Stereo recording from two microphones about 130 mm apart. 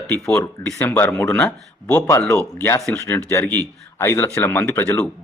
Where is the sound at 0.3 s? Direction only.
20° left (ahead or behind).